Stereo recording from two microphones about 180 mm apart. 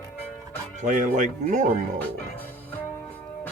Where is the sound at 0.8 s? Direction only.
45° right (ahead or behind).